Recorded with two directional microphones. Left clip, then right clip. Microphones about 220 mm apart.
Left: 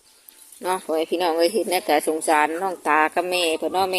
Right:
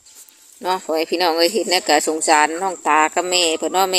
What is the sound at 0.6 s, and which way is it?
Speech, 5° right (ahead or behind).